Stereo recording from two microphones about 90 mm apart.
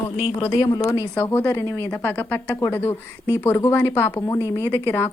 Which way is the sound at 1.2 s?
20° left (ahead or behind).